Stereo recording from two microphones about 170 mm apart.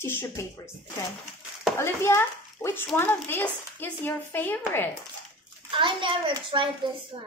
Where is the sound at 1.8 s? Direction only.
15° left (ahead or behind).